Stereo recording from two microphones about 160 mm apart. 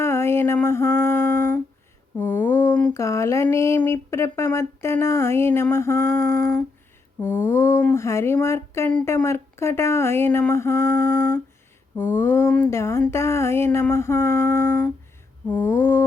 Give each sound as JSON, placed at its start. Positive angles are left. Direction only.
{"t": 0.0, "sound": "female singing", "side_deg": 15}
{"t": 2.1, "sound": "speech", "side_deg": 15}
{"t": 6.2, "sound": "humming", "side_deg": -65}
{"t": 7.2, "sound": "speech", "side_deg": 15}